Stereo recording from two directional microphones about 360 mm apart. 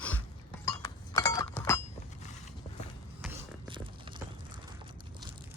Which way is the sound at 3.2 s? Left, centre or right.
Centre.